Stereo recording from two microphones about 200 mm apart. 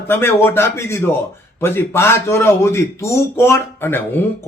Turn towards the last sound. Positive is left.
turn(degrees=10)  # may be behind; listen again after turning